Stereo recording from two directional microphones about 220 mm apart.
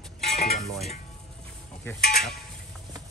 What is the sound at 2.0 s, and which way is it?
Speech, 45° left (ahead or behind).